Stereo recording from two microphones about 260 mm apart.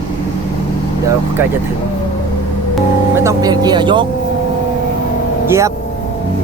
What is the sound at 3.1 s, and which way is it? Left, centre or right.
Speech, centre.